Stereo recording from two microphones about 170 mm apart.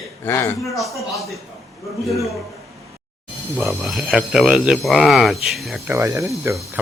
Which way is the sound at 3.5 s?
Centre (ahead or behind).